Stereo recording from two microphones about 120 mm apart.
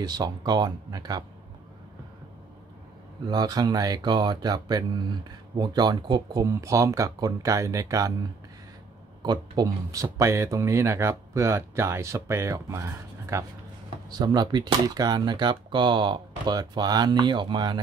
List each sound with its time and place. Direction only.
0.0 s speech: 35° right (ahead or behind)
3.3 s speech: 35° right (ahead or behind)
6.4 s speech: 25° right (ahead or behind)
14.1 s speech: 35° right (ahead or behind)